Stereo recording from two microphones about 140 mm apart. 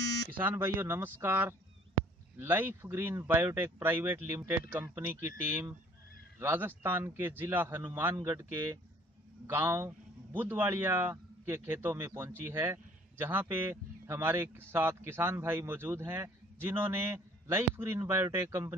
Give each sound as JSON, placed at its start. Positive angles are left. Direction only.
{"t": 0.4, "sound": "a man's voice", "side_deg": -15}